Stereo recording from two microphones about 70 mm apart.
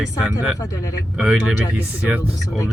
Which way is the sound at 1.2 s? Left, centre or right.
Centre.